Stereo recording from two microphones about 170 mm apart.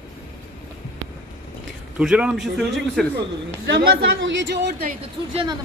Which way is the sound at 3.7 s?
80° right.